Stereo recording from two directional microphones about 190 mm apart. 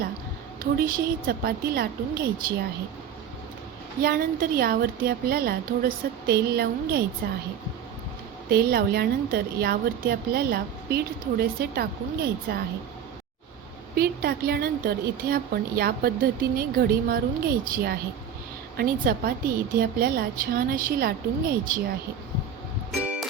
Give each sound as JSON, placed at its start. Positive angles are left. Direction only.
{"t": 0.6, "sound": "speech", "side_deg": -50}
{"t": 4.0, "sound": "a woman's voice", "side_deg": -50}
{"t": 8.4, "sound": "a woman's voice", "side_deg": -55}
{"t": 13.9, "sound": "speech", "side_deg": -55}
{"t": 23.0, "sound": "music", "side_deg": -5}